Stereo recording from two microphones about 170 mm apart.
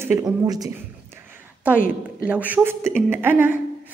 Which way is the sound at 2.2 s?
10° right (ahead or behind).